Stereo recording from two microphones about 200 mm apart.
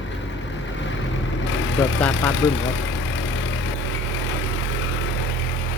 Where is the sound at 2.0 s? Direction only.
10° left (ahead or behind).